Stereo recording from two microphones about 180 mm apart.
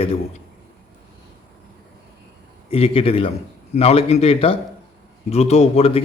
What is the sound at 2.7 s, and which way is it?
A man's voice, 30° left (ahead or behind).